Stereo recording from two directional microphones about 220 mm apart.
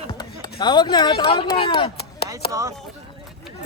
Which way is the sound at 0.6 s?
20° left (ahead or behind).